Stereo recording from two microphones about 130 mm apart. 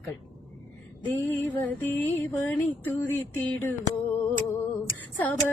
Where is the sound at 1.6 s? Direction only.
15° left (ahead or behind).